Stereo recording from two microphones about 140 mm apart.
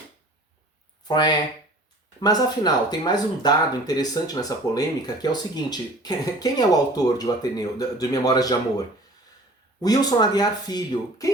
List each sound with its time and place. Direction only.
1.0 s speech: 30° left (ahead or behind)
9.8 s speech: 25° left (ahead or behind)